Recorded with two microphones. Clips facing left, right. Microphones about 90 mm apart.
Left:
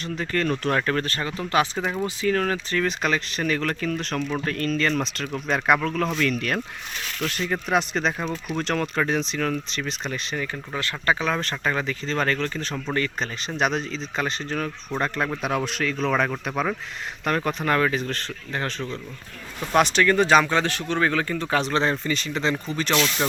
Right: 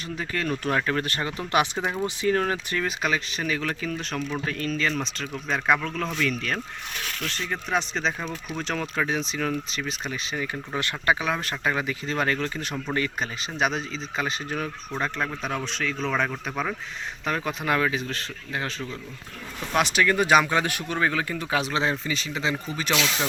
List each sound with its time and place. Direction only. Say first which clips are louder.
0.0 s speech: left 4 dB; 5° right (ahead or behind)
3.0 s speech: left 2 dB; 5° right (ahead or behind)
13.5 s speech: left 3 dB; centre (ahead or behind)